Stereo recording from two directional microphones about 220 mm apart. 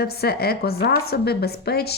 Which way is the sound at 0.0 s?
45° left (ahead or behind).